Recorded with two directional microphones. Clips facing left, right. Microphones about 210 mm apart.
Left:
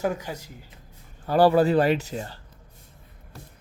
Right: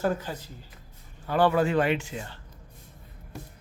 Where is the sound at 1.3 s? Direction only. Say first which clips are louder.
Left 5 dB; 35° left (ahead or behind).